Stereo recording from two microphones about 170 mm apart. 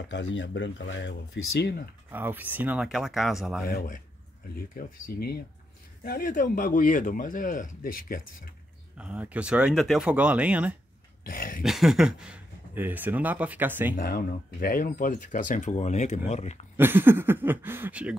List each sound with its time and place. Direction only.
0.1 s speech: 90° left
2.0 s speech: 10° right (ahead or behind)
3.6 s speech: 55° left (ahead or behind)
8.9 s speech: 5° right (ahead or behind)
11.2 s speech: 55° left (ahead or behind)
11.6 s speech: centre (ahead or behind)
13.9 s speech: 60° left (ahead or behind); by 16.6 s 40° left (ahead or behind)
16.7 s speech: 10° right (ahead or behind)